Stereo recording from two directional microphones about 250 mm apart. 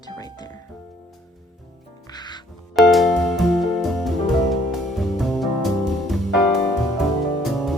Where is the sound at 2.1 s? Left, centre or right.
Centre.